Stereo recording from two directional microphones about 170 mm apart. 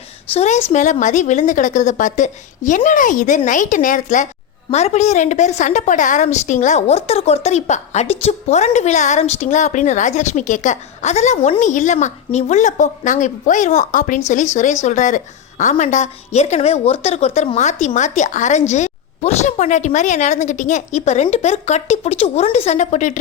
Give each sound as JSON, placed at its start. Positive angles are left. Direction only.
{"t": 0.3, "sound": "a woman's voice", "side_deg": 45}